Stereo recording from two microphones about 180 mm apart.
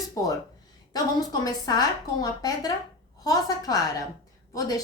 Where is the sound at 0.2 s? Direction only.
20° left (ahead or behind).